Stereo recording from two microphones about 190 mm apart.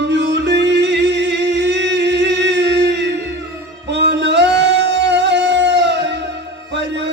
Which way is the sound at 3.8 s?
65° right (ahead or behind).